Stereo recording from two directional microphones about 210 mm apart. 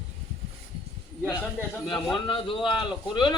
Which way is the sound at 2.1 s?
25° left (ahead or behind).